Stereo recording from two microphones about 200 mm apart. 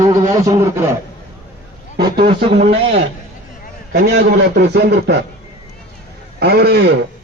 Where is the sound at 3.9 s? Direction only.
55° right (ahead or behind).